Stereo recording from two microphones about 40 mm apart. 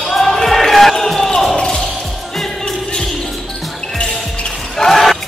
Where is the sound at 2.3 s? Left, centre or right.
Centre.